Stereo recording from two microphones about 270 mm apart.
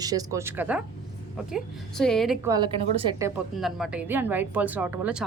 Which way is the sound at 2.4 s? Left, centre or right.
Centre.